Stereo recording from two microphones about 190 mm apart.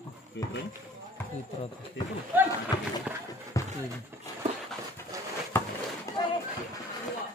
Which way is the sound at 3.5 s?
15° left (ahead or behind).